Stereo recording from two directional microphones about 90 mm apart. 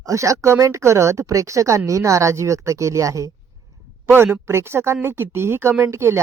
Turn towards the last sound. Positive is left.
turn(degrees=-30)  # may be behind; listen again after turning